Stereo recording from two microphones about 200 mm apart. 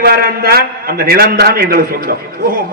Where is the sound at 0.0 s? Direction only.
50° right (ahead or behind).